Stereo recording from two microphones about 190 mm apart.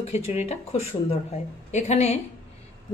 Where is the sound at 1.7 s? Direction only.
35° left (ahead or behind).